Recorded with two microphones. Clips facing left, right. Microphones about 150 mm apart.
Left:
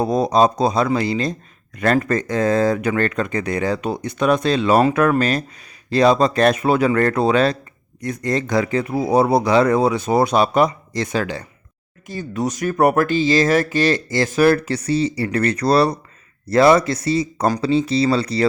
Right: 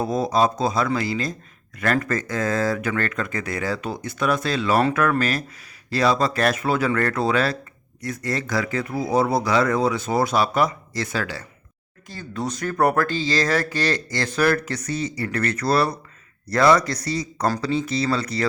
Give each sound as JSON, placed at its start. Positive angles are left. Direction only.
{"t": 0.0, "sound": "speech", "side_deg": 20}
{"t": 15.2, "sound": "speech", "side_deg": 30}